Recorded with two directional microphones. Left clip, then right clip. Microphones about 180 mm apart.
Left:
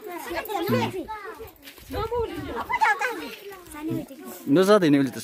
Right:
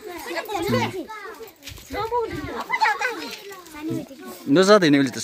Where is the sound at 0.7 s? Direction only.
55° left (ahead or behind).